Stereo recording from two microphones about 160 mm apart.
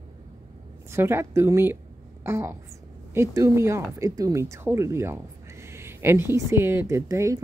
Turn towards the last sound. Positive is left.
turn(degrees=-20)  # may be behind; listen again after turning